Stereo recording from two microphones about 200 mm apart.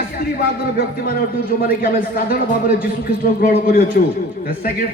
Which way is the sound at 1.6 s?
50° left (ahead or behind).